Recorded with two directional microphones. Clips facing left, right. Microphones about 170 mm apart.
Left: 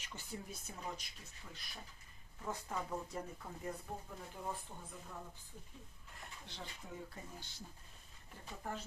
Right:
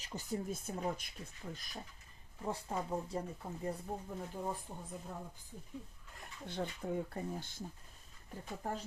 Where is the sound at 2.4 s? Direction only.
30° right (ahead or behind).